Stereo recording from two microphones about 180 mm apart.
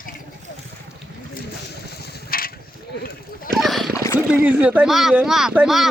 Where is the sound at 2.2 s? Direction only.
55° left (ahead or behind).